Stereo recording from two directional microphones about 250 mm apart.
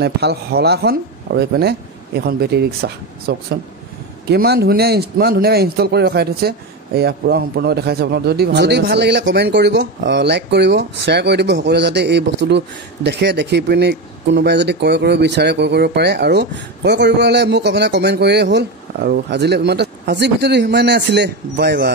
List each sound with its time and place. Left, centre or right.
0.0 s a man's voice: right